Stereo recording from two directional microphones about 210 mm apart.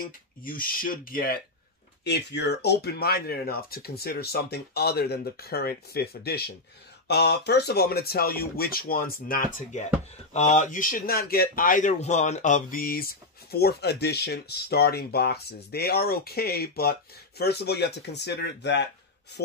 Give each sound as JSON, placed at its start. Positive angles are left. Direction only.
{"t": 0.0, "sound": "a man's voice", "side_deg": 40}